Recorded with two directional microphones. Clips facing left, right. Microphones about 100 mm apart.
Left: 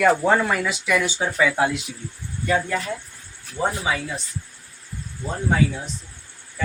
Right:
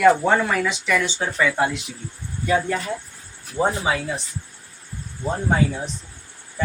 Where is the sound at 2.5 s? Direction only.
10° right (ahead or behind).